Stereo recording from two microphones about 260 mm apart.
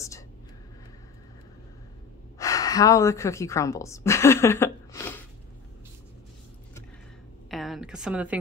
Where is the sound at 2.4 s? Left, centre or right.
Centre.